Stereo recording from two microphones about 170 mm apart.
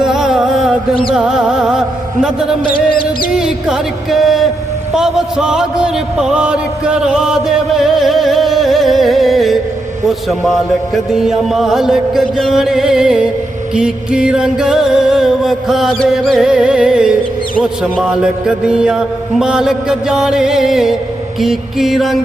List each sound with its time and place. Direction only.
0.0 s music: 5° right (ahead or behind)
1.1 s speech: 5° right (ahead or behind)
2.6 s music: 60° left (ahead or behind)
3.3 s speech: 5° right (ahead or behind)